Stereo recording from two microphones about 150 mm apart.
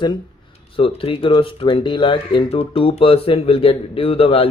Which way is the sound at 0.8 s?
40° left (ahead or behind).